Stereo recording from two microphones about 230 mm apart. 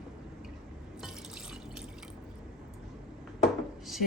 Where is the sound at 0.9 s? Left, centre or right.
Centre.